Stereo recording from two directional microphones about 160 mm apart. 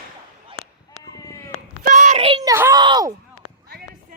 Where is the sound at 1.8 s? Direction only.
55° right (ahead or behind).